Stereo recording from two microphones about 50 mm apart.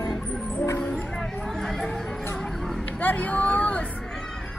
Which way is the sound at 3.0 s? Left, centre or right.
Left.